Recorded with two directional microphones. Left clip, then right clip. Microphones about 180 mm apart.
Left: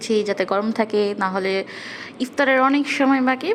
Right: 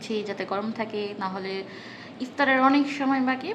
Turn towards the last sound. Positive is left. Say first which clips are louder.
# left 7 dB
turn(degrees=30)  # may be behind; listen again after turning